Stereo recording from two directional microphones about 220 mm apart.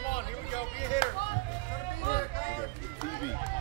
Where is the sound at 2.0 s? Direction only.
30° left (ahead or behind).